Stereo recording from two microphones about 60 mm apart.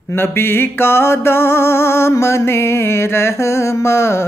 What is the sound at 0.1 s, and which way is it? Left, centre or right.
Music, left.